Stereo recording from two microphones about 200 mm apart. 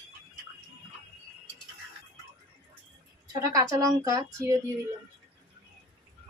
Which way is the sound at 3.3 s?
15° right (ahead or behind).